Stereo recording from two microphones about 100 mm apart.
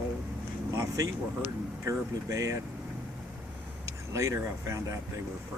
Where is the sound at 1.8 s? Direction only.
35° right (ahead or behind).